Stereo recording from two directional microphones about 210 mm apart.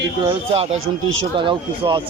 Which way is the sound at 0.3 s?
30° right (ahead or behind).